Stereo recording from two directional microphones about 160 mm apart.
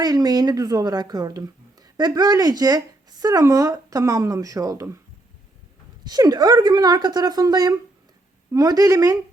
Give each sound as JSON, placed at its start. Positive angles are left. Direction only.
{"t": 0.0, "sound": "speech", "side_deg": -25}
{"t": 6.1, "sound": "speech", "side_deg": -25}